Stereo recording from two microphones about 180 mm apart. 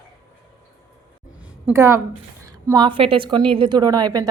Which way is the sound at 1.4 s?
10° right (ahead or behind).